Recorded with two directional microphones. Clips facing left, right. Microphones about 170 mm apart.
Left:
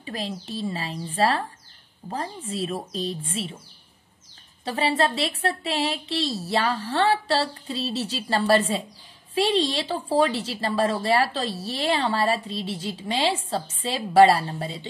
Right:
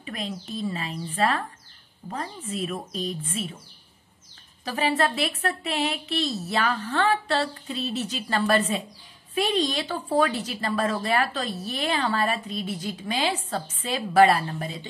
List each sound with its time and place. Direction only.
0.0 s a woman's voice: 30° left (ahead or behind)
4.6 s a woman's voice: 30° left (ahead or behind)